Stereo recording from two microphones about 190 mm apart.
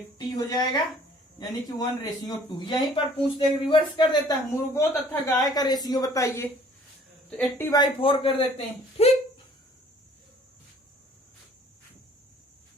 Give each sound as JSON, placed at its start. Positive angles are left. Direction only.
{"t": 0.3, "sound": "a woman's voice", "side_deg": 20}
{"t": 7.7, "sound": "speech", "side_deg": 25}